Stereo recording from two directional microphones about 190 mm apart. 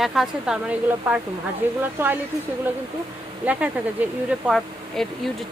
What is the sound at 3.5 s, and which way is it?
Speech, 5° right (ahead or behind).